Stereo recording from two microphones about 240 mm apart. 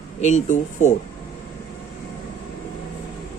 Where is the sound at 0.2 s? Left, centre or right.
Left.